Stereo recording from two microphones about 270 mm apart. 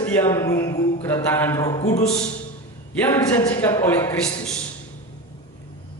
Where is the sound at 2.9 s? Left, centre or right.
Centre.